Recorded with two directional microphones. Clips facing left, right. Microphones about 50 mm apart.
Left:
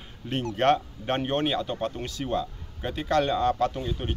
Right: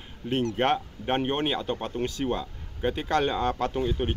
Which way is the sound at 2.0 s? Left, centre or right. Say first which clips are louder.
Even; right.